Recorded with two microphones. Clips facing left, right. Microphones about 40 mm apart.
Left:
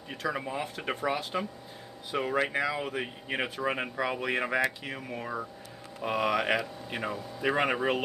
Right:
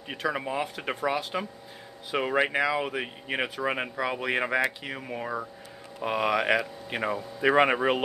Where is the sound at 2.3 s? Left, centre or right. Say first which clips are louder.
Right 5 dB; right.